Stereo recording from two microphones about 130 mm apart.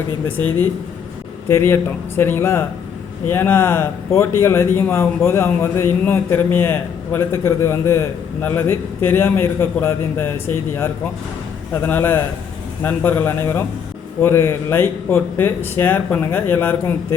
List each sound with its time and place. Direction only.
0.3 s a man's voice: 15° left (ahead or behind)